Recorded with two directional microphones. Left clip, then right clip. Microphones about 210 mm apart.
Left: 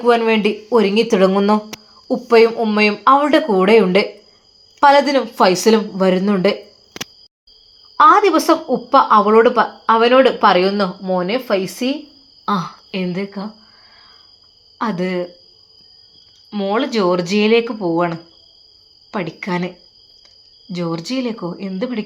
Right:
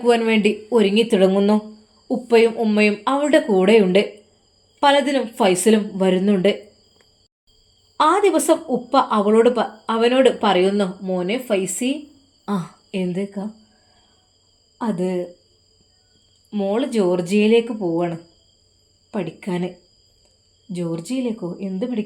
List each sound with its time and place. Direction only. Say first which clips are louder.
0.0 s a woman's voice: left 3 dB; 10° right (ahead or behind)
7.9 s a woman's voice: left 6 dB; 5° right (ahead or behind)
14.8 s a woman's voice: left 3 dB; centre (ahead or behind)
16.5 s a woman's voice: left 3 dB; 5° right (ahead or behind)
20.7 s a woman's voice: left 4 dB; centre (ahead or behind)